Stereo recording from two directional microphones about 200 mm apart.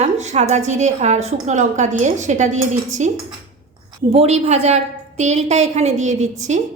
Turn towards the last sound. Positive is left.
turn(degrees=-35)  # may be behind; listen again after turning